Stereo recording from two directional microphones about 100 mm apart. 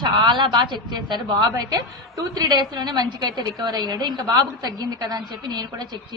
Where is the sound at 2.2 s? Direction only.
40° right (ahead or behind).